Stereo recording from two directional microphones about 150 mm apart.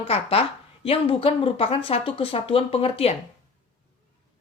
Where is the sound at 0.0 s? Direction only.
40° left (ahead or behind).